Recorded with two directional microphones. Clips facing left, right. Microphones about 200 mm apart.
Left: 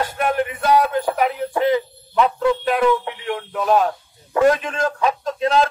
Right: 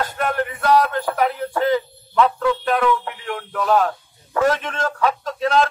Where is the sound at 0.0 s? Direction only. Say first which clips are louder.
Left 2 dB; 10° left (ahead or behind).